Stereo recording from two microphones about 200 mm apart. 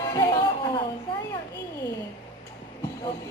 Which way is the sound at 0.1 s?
20° left (ahead or behind).